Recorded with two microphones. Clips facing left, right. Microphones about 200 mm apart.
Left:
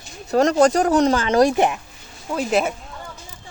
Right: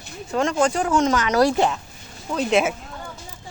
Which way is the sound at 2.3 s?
5° left (ahead or behind).